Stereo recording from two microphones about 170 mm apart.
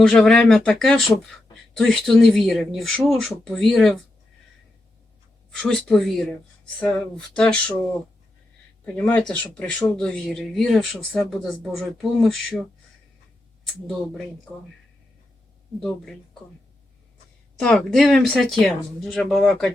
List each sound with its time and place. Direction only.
0.0 s speech: 5° left (ahead or behind)
5.5 s speech: 5° left (ahead or behind)
9.0 s speech: 10° left (ahead or behind)
15.8 s speech: 5° left (ahead or behind)
17.6 s speech: 5° left (ahead or behind)